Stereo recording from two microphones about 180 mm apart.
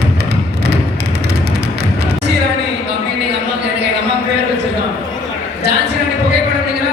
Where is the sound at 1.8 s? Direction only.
65° right (ahead or behind).